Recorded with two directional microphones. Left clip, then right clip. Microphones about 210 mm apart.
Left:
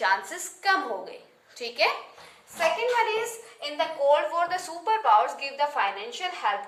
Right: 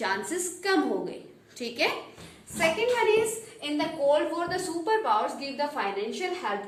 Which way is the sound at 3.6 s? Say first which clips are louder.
Left 2 dB; 20° left (ahead or behind).